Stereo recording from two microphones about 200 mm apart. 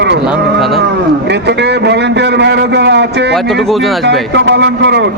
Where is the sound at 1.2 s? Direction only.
55° right (ahead or behind).